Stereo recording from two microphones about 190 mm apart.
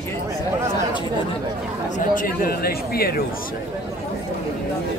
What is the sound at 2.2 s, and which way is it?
Speech, 50° left (ahead or behind).